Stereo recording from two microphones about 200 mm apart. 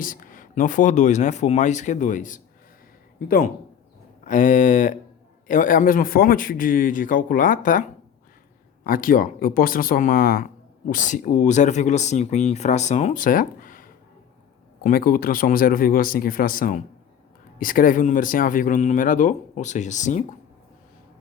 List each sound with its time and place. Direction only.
0.0 s speech: 40° left (ahead or behind)